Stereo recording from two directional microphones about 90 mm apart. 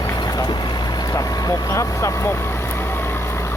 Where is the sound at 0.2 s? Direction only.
50° left (ahead or behind).